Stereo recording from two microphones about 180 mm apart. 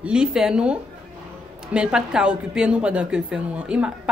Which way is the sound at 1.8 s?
5° right (ahead or behind).